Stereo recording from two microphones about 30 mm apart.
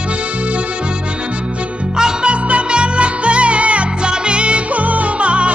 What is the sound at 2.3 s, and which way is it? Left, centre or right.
Music, right.